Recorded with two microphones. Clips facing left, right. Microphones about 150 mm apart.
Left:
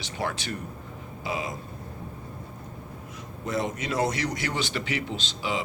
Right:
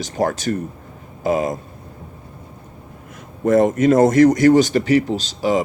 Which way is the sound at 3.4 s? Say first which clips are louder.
Right 15 dB; 50° right (ahead or behind).